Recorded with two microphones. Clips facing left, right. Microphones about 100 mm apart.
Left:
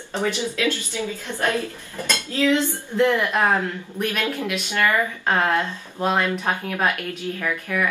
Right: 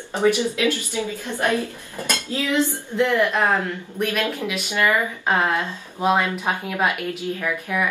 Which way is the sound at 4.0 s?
Centre (ahead or behind).